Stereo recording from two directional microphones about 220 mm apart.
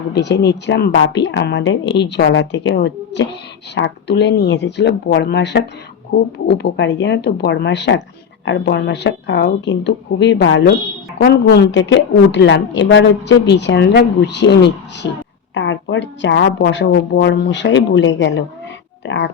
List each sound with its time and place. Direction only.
0.1 s a woman's voice: 50° left (ahead or behind)